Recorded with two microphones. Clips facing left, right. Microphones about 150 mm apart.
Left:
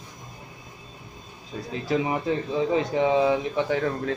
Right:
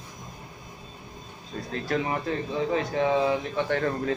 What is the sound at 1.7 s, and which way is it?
Speech, 15° left (ahead or behind).